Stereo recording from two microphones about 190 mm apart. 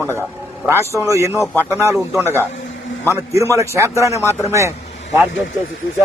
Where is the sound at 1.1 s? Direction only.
15° right (ahead or behind).